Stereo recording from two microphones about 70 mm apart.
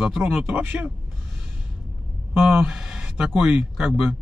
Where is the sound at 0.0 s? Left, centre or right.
Centre.